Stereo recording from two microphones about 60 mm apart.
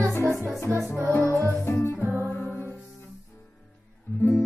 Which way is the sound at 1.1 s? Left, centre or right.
Left.